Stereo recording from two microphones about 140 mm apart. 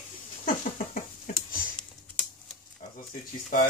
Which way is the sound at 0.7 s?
70° left (ahead or behind).